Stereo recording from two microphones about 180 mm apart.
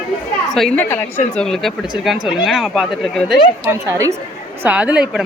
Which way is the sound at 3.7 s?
15° right (ahead or behind).